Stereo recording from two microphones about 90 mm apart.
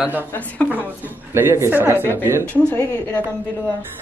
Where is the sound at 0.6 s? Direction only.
15° left (ahead or behind).